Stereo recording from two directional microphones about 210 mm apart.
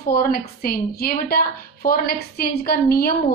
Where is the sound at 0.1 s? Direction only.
45° left (ahead or behind).